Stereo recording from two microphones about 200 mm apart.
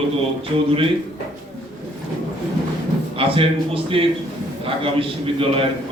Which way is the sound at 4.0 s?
25° right (ahead or behind).